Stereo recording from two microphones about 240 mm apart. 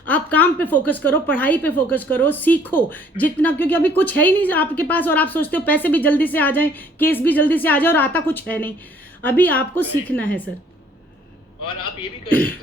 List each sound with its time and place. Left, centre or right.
0.1 s a sound: centre
0.9 s a woman's voice: centre
12.3 s a woman's voice: centre